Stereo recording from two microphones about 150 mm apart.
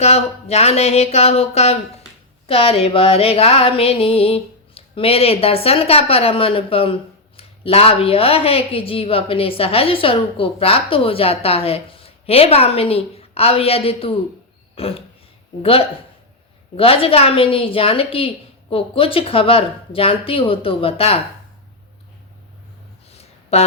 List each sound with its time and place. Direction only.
0.0 s a woman's voice: 45° left (ahead or behind)
16.7 s a woman's voice: 40° left (ahead or behind)
23.0 s a sound: 45° left (ahead or behind)